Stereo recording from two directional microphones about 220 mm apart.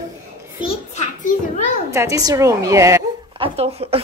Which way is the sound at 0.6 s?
35° left (ahead or behind).